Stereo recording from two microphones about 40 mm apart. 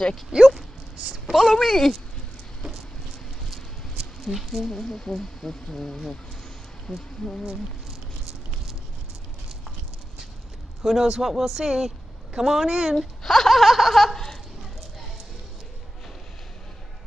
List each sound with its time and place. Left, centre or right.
0.3 s speech: centre
1.3 s speech: centre
4.2 s speech: centre
6.9 s speech: centre
10.8 s speech: centre
13.2 s laughter: centre